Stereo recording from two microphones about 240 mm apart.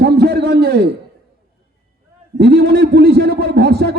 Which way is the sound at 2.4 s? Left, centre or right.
Right.